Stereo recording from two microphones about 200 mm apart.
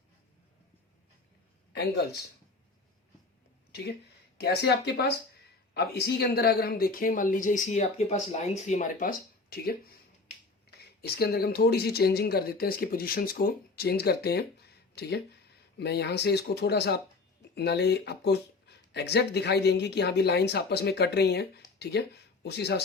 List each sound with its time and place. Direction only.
1.7 s speech: 55° left (ahead or behind)
4.4 s speech: 55° left (ahead or behind)
10.7 s a sound: 50° left (ahead or behind)
11.0 s speech: 55° left (ahead or behind)